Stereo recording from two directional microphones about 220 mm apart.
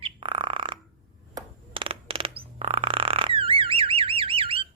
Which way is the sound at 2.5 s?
25° right (ahead or behind).